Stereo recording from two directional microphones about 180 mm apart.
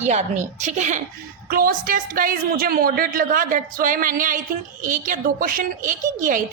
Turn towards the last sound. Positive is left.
turn(degrees=-45)  # may be behind; listen again after turning